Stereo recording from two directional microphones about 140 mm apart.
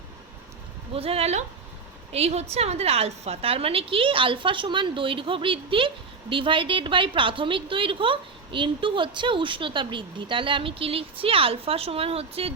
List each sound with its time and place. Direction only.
0.9 s a woman's voice: 45° right (ahead or behind)